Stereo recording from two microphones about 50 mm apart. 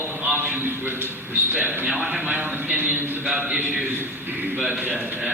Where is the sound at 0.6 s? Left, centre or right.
Right.